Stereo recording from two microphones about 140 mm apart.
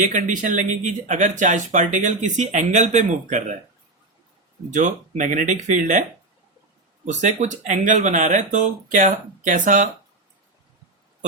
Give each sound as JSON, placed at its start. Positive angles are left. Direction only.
{"t": 0.0, "sound": "speech", "side_deg": -65}
{"t": 4.7, "sound": "speech", "side_deg": -60}